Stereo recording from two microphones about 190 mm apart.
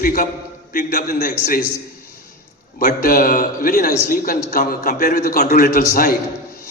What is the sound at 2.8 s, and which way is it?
A man's voice, 50° left (ahead or behind).